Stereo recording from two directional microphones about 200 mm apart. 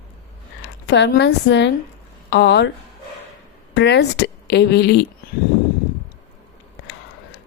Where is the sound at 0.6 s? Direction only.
55° left (ahead or behind).